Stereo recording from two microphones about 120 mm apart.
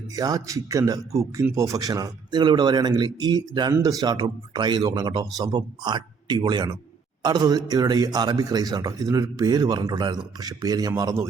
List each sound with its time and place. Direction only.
0.2 s speech: 30° right (ahead or behind)